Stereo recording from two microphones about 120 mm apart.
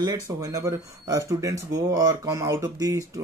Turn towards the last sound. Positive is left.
turn(degrees=-25)  # may be behind; listen again after turning